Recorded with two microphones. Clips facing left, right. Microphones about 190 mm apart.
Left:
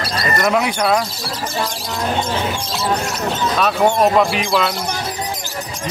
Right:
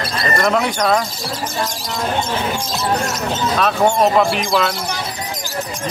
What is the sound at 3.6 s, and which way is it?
Speech, centre (ahead or behind).